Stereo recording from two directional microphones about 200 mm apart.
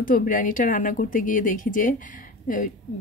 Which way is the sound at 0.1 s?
40° left (ahead or behind).